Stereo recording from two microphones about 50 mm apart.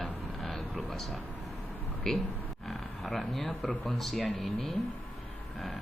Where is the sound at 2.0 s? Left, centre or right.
Centre.